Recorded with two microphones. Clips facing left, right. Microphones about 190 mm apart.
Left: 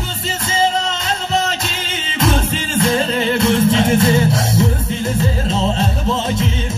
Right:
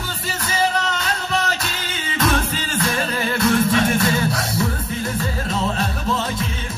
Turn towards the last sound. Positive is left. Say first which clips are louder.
# left 4 dB
turn(degrees=25)  # may be behind; listen again after turning